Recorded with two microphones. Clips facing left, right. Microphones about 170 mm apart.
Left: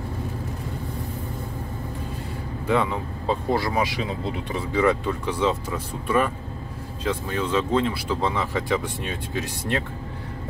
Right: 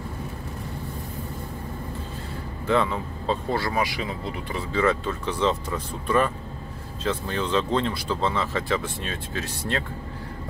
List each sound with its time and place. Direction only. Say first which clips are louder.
2.6 s speech: even; 15° left (ahead or behind)